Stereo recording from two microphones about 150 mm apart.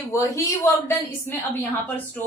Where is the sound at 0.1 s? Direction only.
20° left (ahead or behind).